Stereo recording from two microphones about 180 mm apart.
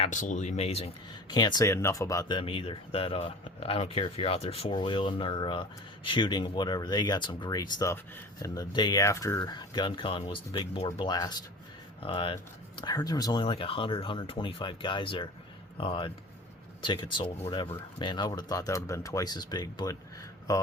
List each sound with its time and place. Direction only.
0.0 s speech: 45° left (ahead or behind)
1.3 s speech: 25° left (ahead or behind)